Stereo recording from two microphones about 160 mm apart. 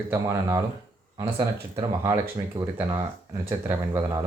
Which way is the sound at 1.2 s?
30° right (ahead or behind).